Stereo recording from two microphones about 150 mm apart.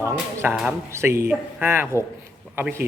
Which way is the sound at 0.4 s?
10° right (ahead or behind).